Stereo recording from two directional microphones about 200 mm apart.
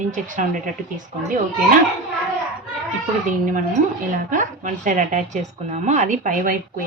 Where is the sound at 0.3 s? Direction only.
40° right (ahead or behind).